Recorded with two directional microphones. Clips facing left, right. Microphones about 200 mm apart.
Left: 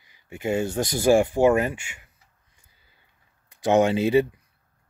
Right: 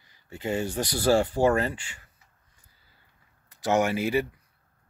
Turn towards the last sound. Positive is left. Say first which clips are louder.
# left 6 dB
turn(degrees=20)  # may be behind; listen again after turning